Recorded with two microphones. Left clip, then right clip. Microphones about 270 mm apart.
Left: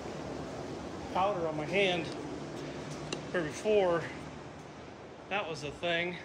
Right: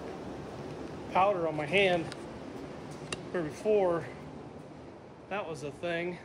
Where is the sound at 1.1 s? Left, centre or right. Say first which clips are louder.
Right 4 dB; right.